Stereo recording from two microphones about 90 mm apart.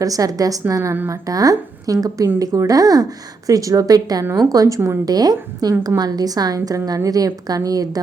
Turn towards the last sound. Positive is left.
turn(degrees=-45)  # may be behind; listen again after turning